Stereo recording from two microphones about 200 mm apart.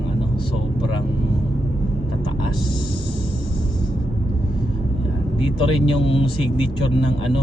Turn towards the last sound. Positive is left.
turn(degrees=25)  # may be behind; listen again after turning